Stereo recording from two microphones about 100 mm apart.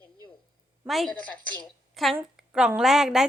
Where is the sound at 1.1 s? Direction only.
45° left (ahead or behind).